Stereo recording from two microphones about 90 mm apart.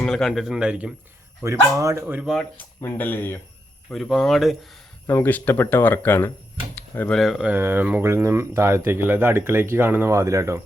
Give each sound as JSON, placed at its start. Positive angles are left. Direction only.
{"t": 0.0, "sound": "speech", "side_deg": 5}
{"t": 1.5, "sound": "a man's voice", "side_deg": -35}
{"t": 2.8, "sound": "speech", "side_deg": 25}
{"t": 3.9, "sound": "speech", "side_deg": 0}
{"t": 5.0, "sound": "speech", "side_deg": 25}
{"t": 6.7, "sound": "a sound", "side_deg": 20}
{"t": 7.1, "sound": "speech", "side_deg": 0}
{"t": 7.4, "sound": "speech", "side_deg": -25}